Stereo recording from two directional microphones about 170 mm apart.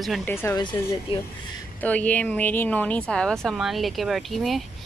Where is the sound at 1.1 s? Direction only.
30° left (ahead or behind).